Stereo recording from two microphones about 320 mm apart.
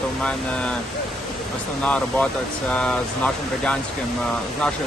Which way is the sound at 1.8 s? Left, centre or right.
Centre.